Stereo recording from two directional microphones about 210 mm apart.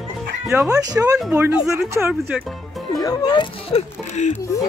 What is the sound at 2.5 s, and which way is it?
Music, centre (ahead or behind).